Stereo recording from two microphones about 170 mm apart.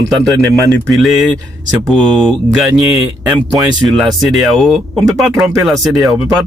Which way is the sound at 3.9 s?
Centre (ahead or behind).